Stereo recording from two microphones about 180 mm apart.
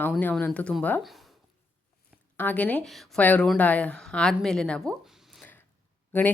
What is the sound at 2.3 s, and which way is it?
Speech, 10° left (ahead or behind).